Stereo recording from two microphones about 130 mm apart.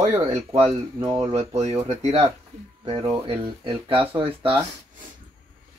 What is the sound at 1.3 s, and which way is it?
Speech, 55° right (ahead or behind).